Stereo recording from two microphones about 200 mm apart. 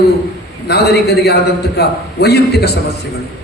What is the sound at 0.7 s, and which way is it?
A man's voice, 55° left (ahead or behind).